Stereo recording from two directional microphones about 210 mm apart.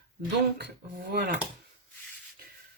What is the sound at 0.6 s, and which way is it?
Speech, 50° right (ahead or behind).